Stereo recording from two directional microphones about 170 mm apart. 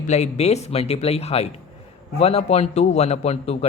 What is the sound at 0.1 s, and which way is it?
Speech, 40° left (ahead or behind).